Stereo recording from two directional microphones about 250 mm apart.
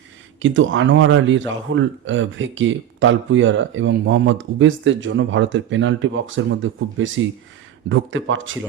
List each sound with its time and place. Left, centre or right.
0.4 s a man's voice: right